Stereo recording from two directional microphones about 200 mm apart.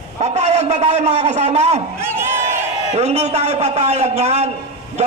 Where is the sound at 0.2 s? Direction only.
30° right (ahead or behind).